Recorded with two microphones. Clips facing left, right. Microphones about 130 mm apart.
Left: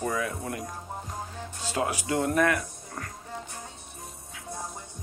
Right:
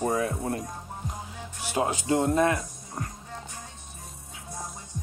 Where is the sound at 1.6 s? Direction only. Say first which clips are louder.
Right 2 dB; 20° right (ahead or behind).